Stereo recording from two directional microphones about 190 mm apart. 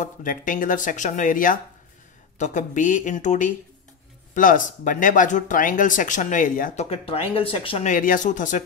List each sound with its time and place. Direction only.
0.0 s speech: 45° left (ahead or behind)
7.9 s speech: 45° left (ahead or behind)